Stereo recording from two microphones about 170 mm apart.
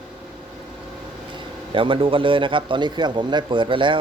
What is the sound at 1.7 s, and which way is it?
A man's voice, 30° right (ahead or behind).